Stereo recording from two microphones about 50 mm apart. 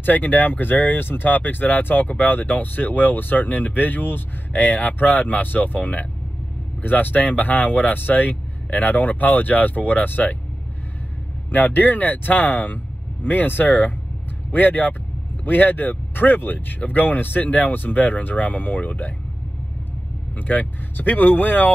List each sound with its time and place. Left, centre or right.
0.0 s speech: left
11.5 s speech: left
20.3 s speech: left